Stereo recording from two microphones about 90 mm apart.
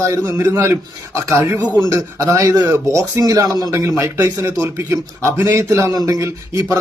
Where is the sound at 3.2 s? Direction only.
40° right (ahead or behind).